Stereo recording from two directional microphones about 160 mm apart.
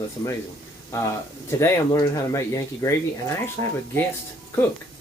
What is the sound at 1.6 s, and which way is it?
Speech, 20° left (ahead or behind).